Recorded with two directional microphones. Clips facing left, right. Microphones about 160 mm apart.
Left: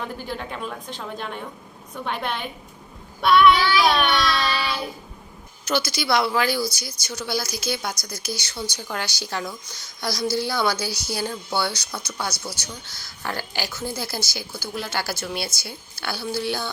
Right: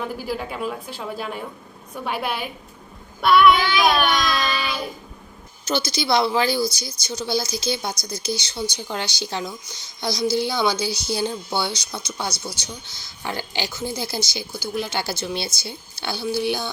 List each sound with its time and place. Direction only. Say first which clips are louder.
0.0 s a woman's voice: right 3 dB; 5° right (ahead or behind)
3.6 s speech: left 1 dB; 20° right (ahead or behind)
3.8 s a woman's voice: right 4 dB; 5° right (ahead or behind)
5.6 s speech: right 1 dB; 20° right (ahead or behind)